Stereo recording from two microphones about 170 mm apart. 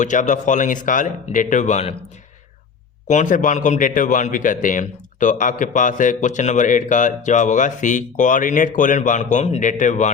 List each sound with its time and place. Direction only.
0.0 s a man's voice: 45° left (ahead or behind)
3.1 s a man's voice: 45° left (ahead or behind)